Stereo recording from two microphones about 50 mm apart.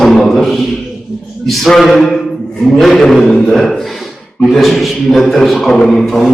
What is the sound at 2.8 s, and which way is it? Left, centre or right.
Chant, centre.